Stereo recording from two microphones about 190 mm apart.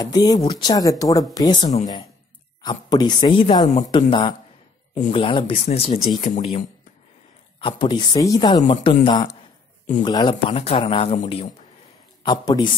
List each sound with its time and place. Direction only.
0.0 s speech: 20° left (ahead or behind)
1.6 s speech: 35° left (ahead or behind)
2.6 s speech: 20° left (ahead or behind)
7.6 s speech: 25° left (ahead or behind)